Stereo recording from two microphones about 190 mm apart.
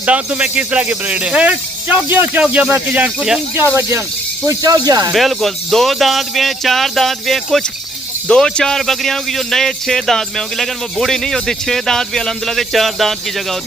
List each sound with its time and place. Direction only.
0.0 s speech: 5° right (ahead or behind)
5.1 s a man's voice: centre (ahead or behind)